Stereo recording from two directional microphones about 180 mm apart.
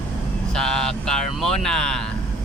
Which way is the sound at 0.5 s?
5° left (ahead or behind).